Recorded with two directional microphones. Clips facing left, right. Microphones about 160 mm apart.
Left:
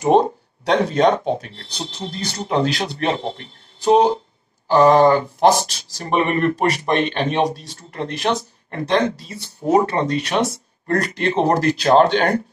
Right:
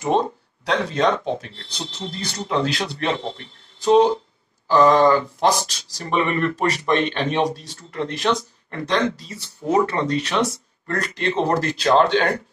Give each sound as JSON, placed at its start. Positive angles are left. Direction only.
{"t": 0.7, "sound": "speech", "side_deg": 40}
{"t": 6.0, "sound": "speech", "side_deg": 40}